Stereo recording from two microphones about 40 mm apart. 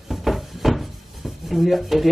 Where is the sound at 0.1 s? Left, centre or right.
Centre.